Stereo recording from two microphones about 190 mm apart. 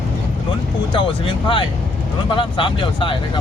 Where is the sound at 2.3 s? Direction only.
25° left (ahead or behind).